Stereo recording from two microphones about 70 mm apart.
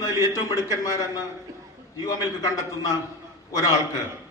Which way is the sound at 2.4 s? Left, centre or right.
Left.